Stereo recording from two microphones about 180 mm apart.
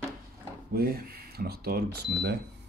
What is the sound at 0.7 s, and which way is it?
Speech, 60° right (ahead or behind).